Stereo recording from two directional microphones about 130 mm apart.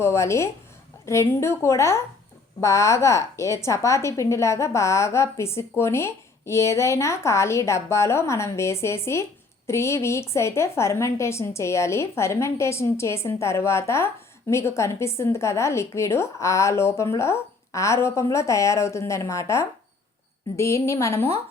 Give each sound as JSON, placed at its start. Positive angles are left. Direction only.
{"t": 0.0, "sound": "a woman's voice", "side_deg": 20}